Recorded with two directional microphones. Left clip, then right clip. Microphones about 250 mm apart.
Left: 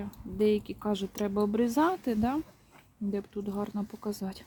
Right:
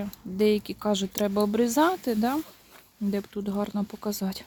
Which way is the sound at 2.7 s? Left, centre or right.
Right.